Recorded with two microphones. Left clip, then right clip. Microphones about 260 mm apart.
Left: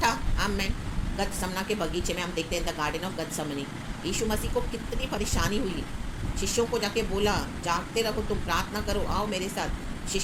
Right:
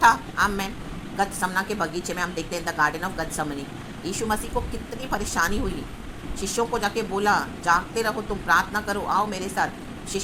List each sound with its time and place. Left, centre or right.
0.0 s a woman's voice: centre